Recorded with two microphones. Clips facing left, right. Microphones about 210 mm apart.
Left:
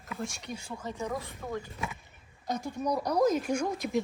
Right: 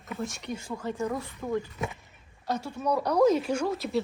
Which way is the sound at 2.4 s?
15° left (ahead or behind).